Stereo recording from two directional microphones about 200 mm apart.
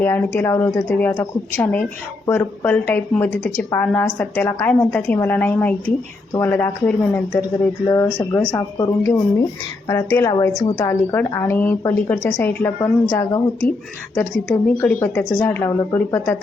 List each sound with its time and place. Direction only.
0.0 s a woman's voice: 10° left (ahead or behind)